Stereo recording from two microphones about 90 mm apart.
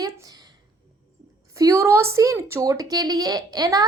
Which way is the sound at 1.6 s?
35° right (ahead or behind).